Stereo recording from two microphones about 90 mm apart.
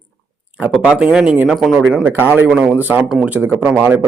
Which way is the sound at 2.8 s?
20° right (ahead or behind).